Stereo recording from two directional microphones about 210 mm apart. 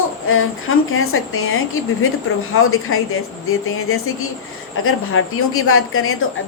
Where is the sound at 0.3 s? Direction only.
75° left (ahead or behind).